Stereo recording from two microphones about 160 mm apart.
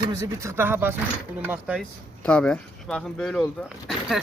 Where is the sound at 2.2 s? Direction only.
5° left (ahead or behind).